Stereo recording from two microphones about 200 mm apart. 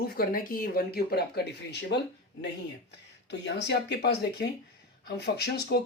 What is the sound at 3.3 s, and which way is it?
Speech, 60° left (ahead or behind).